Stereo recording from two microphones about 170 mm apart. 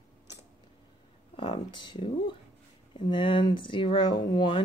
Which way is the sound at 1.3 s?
30° left (ahead or behind).